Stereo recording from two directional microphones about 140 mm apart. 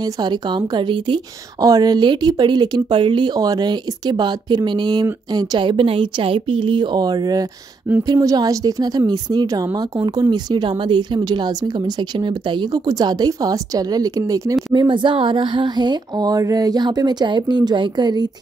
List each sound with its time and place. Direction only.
0.0 s a woman's voice: 30° right (ahead or behind)